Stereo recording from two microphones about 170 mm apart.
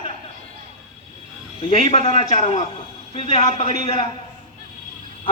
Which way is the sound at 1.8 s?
40° left (ahead or behind).